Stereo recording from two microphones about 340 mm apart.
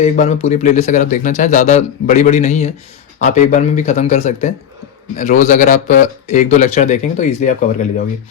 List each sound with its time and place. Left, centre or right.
0.0 s speech: centre